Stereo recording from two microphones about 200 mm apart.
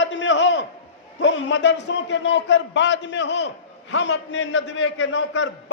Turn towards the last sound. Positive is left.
turn(degrees=65)  # may be behind; listen again after turning